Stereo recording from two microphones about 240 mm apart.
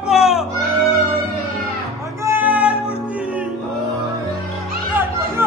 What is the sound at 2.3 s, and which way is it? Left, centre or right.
Music, centre.